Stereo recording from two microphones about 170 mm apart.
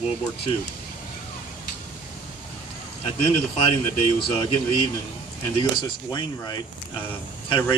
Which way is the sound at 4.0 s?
30° left (ahead or behind).